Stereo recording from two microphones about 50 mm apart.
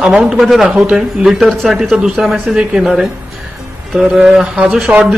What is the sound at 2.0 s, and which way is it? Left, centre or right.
A man's voice, centre.